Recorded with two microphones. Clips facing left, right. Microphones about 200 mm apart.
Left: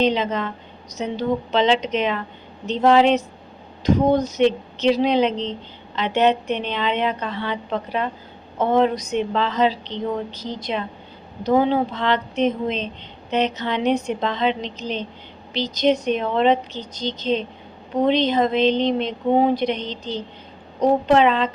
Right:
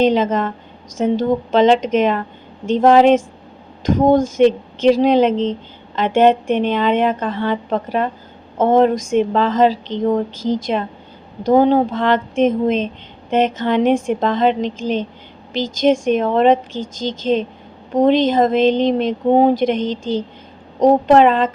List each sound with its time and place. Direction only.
0.0 s speech: 45° right (ahead or behind)